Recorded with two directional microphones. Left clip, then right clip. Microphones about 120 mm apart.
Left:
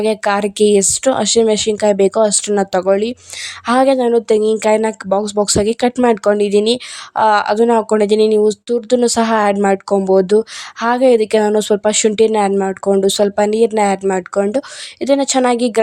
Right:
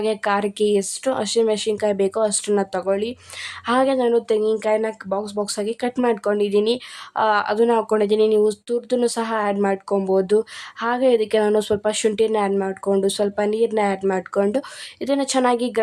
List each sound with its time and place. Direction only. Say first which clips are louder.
0.0 s speech: left 5 dB; 50° left (ahead or behind)
7.2 s speech: left 6 dB; 50° left (ahead or behind); by 9.6 s 70° left (ahead or behind)
9.6 s speech: left 7 dB; 55° left (ahead or behind)
14.1 s speech: left 5 dB; 45° left (ahead or behind)